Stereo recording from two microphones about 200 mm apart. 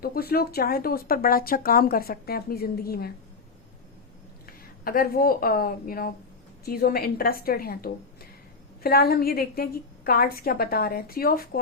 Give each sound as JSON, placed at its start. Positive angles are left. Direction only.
{"t": 0.0, "sound": "speech", "side_deg": 50}
{"t": 4.4, "sound": "a woman's voice", "side_deg": 45}